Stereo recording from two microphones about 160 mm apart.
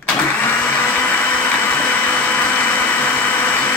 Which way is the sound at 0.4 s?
10° left (ahead or behind).